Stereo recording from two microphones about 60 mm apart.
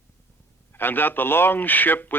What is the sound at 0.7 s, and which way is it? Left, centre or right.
Speech, left.